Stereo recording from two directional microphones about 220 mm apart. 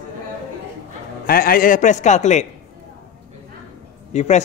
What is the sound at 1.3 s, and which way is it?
A man's voice, 40° left (ahead or behind).